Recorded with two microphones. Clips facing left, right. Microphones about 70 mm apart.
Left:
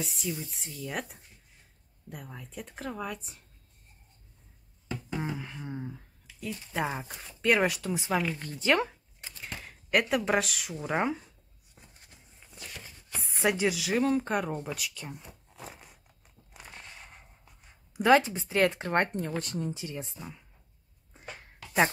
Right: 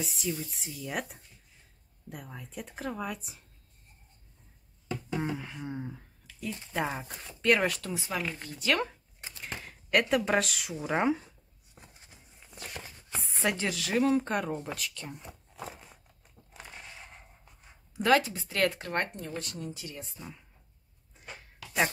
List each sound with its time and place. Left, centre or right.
0.0 s speech: centre
5.1 s speech: centre
8.5 s speech: left
9.4 s speech: centre
13.4 s speech: centre
16.7 s a sound: centre
17.9 s speech: left
18.8 s speech: left
19.1 s speech: left
20.2 s speech: centre